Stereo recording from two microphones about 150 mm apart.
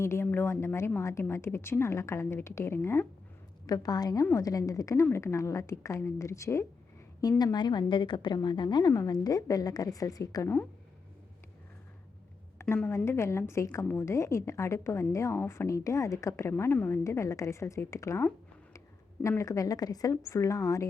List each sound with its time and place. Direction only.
0.0 s a woman's voice: 15° left (ahead or behind)
3.7 s a woman's voice: 25° left (ahead or behind)
12.6 s a woman's voice: 10° left (ahead or behind)